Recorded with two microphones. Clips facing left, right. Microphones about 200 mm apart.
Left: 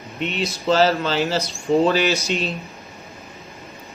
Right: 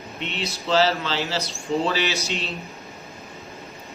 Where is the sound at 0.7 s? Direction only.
45° left (ahead or behind).